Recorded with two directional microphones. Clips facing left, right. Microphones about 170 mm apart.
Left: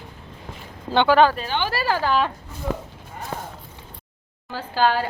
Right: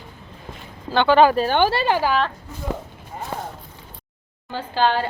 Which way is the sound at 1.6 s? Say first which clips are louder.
Right 3 dB; 25° right (ahead or behind).